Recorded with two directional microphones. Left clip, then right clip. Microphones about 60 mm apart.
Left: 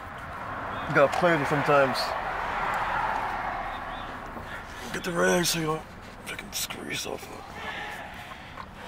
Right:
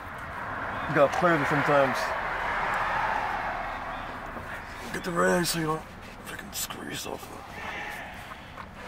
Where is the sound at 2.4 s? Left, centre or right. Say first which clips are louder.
Right 1 dB; right.